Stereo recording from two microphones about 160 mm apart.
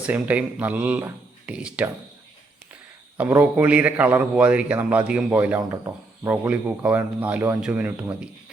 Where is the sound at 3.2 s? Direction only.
10° right (ahead or behind).